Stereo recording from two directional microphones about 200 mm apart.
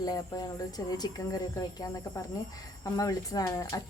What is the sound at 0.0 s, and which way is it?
Speech, 20° left (ahead or behind).